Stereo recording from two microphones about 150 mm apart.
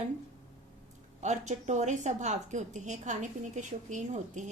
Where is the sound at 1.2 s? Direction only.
50° right (ahead or behind).